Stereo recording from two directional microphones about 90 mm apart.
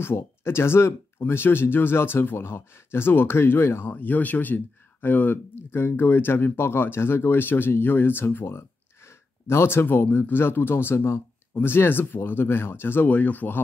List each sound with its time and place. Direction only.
0.0 s speech: 30° left (ahead or behind)